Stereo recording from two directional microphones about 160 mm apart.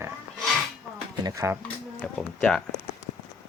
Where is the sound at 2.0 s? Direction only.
5° left (ahead or behind).